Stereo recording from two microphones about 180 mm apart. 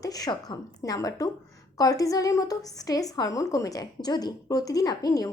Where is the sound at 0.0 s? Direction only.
20° left (ahead or behind).